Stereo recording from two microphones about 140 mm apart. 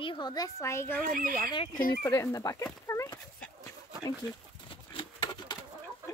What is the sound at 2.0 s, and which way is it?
Speech, 25° left (ahead or behind).